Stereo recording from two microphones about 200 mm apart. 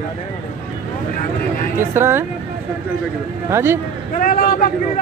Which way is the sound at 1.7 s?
10° right (ahead or behind).